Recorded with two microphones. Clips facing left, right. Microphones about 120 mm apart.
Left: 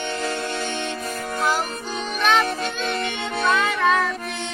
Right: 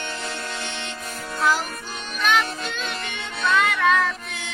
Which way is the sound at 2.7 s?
30° left (ahead or behind).